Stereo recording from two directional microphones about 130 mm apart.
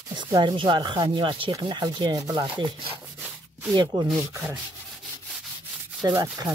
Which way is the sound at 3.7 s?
35° right (ahead or behind).